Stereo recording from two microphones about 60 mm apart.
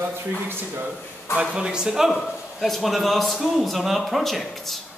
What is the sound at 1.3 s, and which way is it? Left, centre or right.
Speech, centre.